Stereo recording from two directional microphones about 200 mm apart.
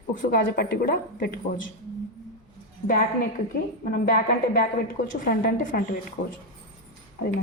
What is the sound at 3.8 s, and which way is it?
A woman's voice, 45° left (ahead or behind).